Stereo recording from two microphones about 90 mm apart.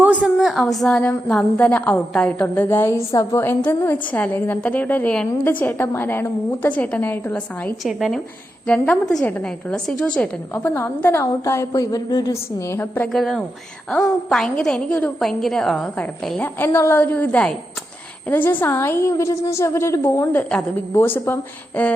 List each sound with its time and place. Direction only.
0.0 s a sound: 15° right (ahead or behind)
0.3 s a woman's voice: centre (ahead or behind)
1.5 s a woman's voice: 15° left (ahead or behind)
2.6 s a woman's voice: 25° left (ahead or behind)
7.9 s a woman's voice: centre (ahead or behind)
8.6 s a woman's voice: 10° left (ahead or behind)
10.5 s a woman's voice: 25° left (ahead or behind); by 12.3 s 45° left (ahead or behind)
12.3 s a woman's voice: 30° left (ahead or behind)
13.1 s a woman's voice: 5° left (ahead or behind)
16.4 s a woman's voice: 20° left (ahead or behind)